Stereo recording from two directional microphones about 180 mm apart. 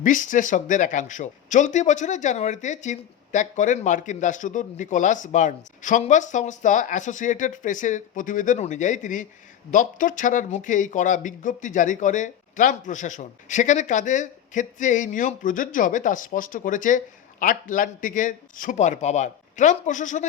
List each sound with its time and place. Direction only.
0.0 s speech: 45° left (ahead or behind)